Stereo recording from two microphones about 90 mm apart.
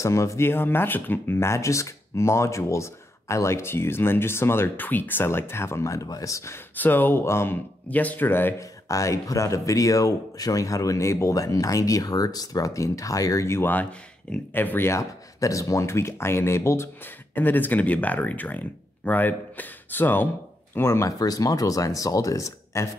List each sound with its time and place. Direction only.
0.0 s speech: 35° left (ahead or behind)
6.8 s speech: 20° left (ahead or behind)
8.5 s speech: 35° left (ahead or behind)
21.2 s speech: 40° left (ahead or behind)